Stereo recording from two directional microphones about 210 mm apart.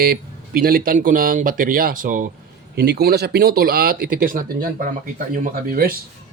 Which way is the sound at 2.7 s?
50° right (ahead or behind).